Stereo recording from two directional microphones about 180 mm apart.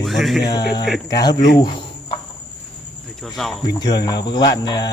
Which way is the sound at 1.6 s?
25° left (ahead or behind).